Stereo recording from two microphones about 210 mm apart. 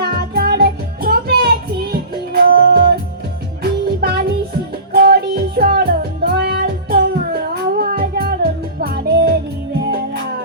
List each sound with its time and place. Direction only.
0.0 s music: 45° right (ahead or behind)